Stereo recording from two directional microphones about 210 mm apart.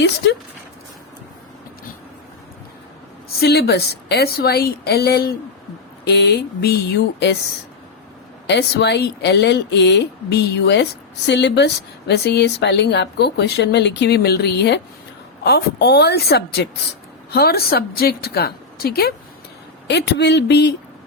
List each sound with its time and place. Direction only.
3.4 s speech: 50° left (ahead or behind)
8.4 s speech: 55° left (ahead or behind)